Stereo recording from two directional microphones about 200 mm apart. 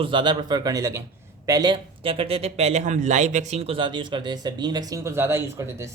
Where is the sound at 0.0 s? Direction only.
25° right (ahead or behind).